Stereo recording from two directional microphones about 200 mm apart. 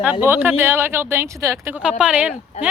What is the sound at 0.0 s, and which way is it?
Speech, 10° right (ahead or behind).